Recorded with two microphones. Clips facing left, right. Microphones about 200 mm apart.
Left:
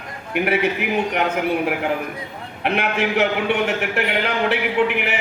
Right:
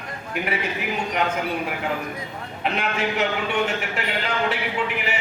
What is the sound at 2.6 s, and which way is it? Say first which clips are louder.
A man's voice: left 4 dB; 65° left (ahead or behind).